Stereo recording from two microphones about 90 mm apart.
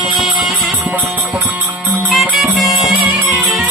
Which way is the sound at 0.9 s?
20° right (ahead or behind).